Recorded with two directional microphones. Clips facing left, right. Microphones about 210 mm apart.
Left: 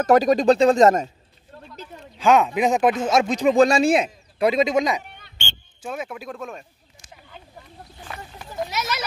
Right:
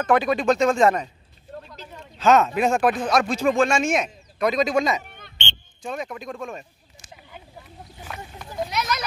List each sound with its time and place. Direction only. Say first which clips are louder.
0.0 s speech: left 4 dB; 40° left (ahead or behind)
2.1 s speech: even; 15° left (ahead or behind)
3.5 s speech: left 5 dB; 35° left (ahead or behind); by 5.0 s 15° left (ahead or behind)
5.0 s a sound: right 1 dB; 50° right (ahead or behind)
5.4 s speech: even; 5° left (ahead or behind)